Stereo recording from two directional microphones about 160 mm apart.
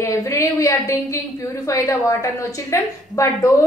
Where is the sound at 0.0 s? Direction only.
20° left (ahead or behind).